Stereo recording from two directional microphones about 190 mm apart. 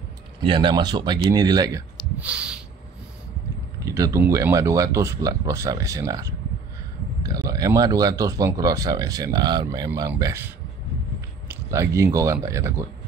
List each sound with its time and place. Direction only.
0.4 s speech: 25° right (ahead or behind)
2.0 s a sound: 5° right (ahead or behind)
3.8 s speech: 15° right (ahead or behind)